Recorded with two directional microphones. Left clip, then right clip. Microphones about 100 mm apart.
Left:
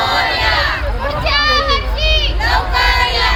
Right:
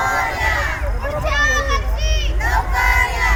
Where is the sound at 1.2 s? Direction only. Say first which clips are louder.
Left 4 dB; 15° left (ahead or behind).